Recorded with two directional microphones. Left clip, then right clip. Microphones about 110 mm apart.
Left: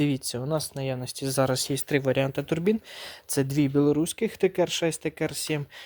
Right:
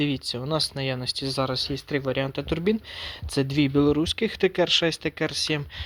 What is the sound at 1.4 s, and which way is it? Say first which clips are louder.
Speech: left 3 dB; 90° left.